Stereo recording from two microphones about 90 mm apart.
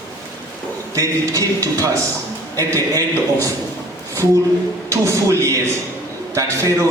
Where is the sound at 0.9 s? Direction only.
35° right (ahead or behind).